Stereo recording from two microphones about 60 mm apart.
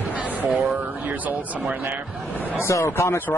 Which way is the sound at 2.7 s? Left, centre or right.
Left.